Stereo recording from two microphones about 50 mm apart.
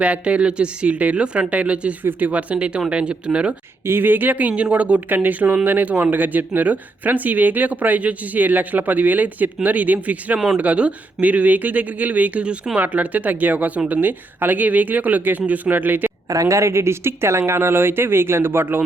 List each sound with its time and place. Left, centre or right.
0.0 s speech: right
2.0 s speech: right
3.8 s speech: right
16.0 s speech: right